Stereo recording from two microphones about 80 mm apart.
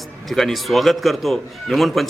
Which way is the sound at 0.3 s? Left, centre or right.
Centre.